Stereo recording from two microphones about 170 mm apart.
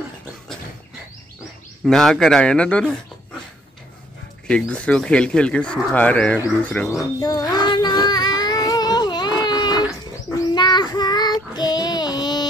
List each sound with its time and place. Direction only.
1.9 s speech: centre (ahead or behind)
4.5 s speech: 5° left (ahead or behind)
7.2 s child singing: 20° left (ahead or behind)